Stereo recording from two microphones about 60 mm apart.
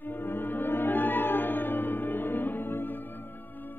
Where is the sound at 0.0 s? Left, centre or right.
Left.